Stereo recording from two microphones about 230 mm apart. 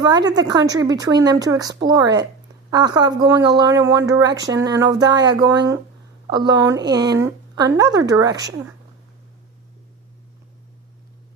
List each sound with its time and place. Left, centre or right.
0.0 s speech: centre